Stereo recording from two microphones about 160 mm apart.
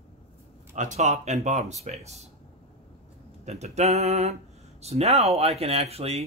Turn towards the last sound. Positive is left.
turn(degrees=-40)  # may be behind; listen again after turning